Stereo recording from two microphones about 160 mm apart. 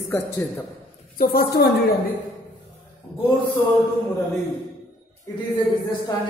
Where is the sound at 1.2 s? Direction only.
70° left (ahead or behind).